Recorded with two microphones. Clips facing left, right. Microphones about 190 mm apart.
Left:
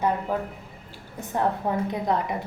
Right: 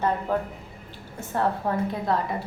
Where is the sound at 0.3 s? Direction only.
10° left (ahead or behind).